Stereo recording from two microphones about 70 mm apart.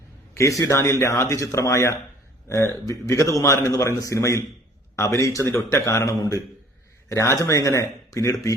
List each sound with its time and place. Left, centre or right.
0.6 s speech: left